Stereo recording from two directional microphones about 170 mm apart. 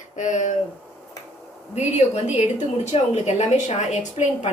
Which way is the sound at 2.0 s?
40° left (ahead or behind).